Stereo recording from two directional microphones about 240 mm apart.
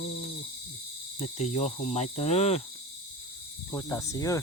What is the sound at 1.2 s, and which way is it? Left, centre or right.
Cricket, left.